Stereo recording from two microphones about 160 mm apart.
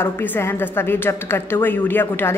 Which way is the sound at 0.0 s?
15° left (ahead or behind).